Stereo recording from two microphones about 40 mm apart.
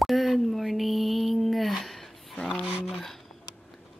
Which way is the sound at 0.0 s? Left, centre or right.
Centre.